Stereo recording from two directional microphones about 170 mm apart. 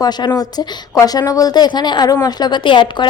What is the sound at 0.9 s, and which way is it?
A woman's voice, 20° left (ahead or behind).